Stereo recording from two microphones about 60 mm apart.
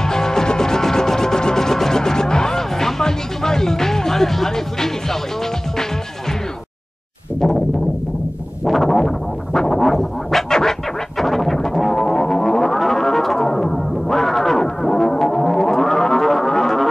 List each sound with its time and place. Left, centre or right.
0.0 s music: centre
7.3 s a sound: centre
8.6 s music: centre